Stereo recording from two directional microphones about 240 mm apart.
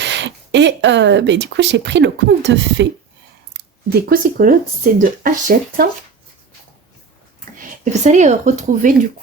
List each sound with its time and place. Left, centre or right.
0.0 s speech: right
7.6 s speech: right